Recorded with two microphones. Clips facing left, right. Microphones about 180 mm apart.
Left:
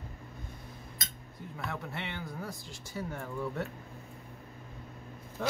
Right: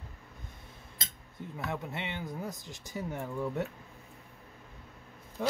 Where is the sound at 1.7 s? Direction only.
20° right (ahead or behind).